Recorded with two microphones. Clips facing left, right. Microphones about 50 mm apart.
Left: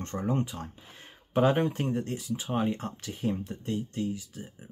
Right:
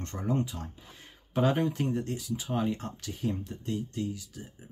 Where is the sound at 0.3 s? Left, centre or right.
Left.